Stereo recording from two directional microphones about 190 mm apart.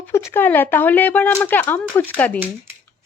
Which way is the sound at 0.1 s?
15° left (ahead or behind).